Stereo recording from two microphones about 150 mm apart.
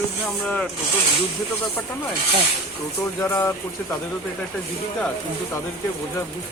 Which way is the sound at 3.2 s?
20° left (ahead or behind).